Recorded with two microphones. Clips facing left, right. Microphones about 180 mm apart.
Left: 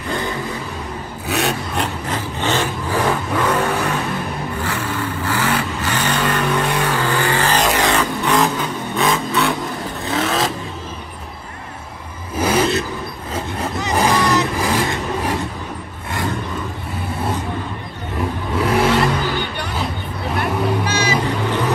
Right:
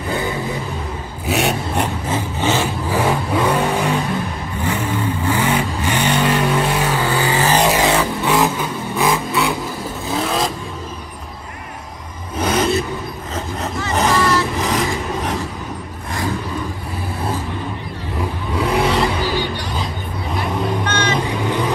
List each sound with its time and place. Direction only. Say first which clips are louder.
1.2 s vehicle: right 2 dB; 15° right (ahead or behind)
9.0 s vehicle: even; centre (ahead or behind)
12.4 s vehicle: even; 5° left (ahead or behind)
18.6 s vehicle: left 1 dB; centre (ahead or behind)
19.5 s music: even; 60° left (ahead or behind)
20.4 s vehicle: left 1 dB; 10° left (ahead or behind)
21.3 s vehicle: even; 10° right (ahead or behind)